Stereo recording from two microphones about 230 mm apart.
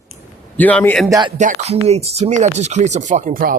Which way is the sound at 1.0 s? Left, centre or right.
Centre.